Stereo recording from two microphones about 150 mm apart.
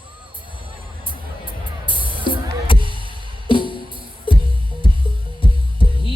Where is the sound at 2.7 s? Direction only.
35° left (ahead or behind).